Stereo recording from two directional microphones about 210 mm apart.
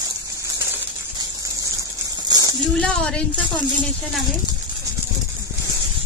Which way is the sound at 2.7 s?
5° left (ahead or behind).